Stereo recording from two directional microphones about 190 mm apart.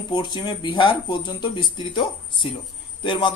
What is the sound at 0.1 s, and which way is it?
Speech, 20° left (ahead or behind).